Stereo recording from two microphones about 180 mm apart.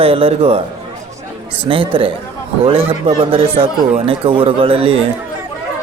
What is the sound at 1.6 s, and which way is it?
A man's voice, 30° right (ahead or behind).